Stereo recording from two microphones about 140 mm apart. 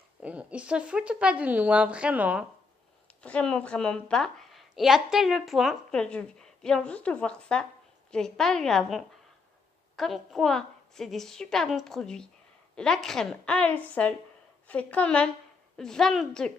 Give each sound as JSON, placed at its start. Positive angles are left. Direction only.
{"t": 0.2, "sound": "speech", "side_deg": -10}
{"t": 3.2, "sound": "a woman's voice", "side_deg": 10}